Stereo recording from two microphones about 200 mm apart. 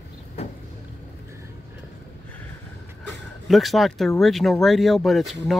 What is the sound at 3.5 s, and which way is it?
Speech, centre (ahead or behind).